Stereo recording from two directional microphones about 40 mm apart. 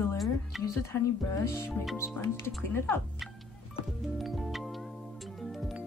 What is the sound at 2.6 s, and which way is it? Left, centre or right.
Speech, left.